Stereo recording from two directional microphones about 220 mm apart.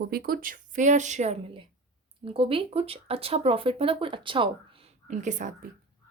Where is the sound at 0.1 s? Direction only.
45° right (ahead or behind); by 4.5 s 25° right (ahead or behind).